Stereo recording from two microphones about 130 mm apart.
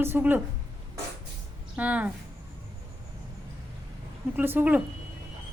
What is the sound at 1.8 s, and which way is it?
Speech, 10° right (ahead or behind).